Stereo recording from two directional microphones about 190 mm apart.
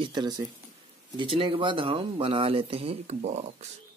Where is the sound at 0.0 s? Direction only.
25° right (ahead or behind).